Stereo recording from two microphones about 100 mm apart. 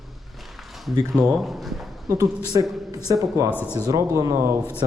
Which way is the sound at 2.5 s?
45° right (ahead or behind).